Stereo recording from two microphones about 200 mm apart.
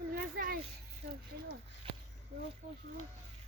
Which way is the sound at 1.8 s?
30° right (ahead or behind).